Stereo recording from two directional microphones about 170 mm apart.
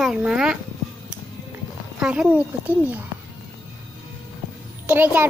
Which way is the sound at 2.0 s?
5° right (ahead or behind).